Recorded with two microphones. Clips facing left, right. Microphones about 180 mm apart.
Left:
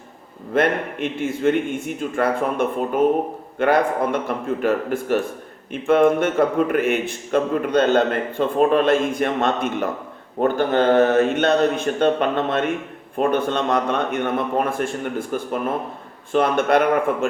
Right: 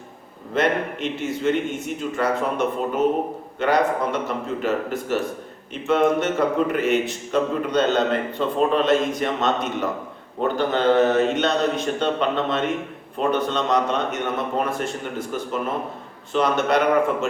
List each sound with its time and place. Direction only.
0.5 s a man's voice: 55° left (ahead or behind)